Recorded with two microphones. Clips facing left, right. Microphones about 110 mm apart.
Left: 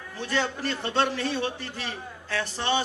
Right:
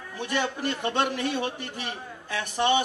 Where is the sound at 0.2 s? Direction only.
15° right (ahead or behind).